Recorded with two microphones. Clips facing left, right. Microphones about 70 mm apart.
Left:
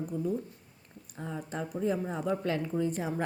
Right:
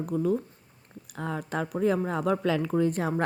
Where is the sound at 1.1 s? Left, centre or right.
Right.